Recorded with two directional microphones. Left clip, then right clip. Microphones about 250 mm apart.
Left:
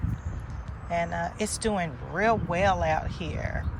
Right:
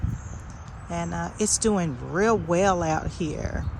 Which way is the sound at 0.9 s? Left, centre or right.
Centre.